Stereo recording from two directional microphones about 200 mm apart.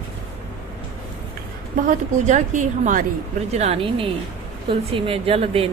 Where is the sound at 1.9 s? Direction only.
35° right (ahead or behind).